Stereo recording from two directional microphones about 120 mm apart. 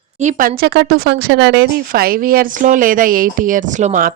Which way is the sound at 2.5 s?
90° right.